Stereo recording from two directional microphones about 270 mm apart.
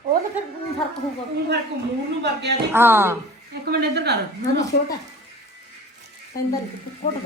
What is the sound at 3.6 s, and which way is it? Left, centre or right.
Speech, right.